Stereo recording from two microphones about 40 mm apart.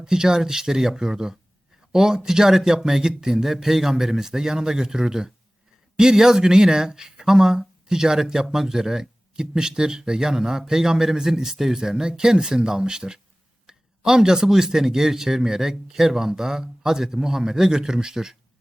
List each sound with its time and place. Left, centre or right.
0.0 s speech: centre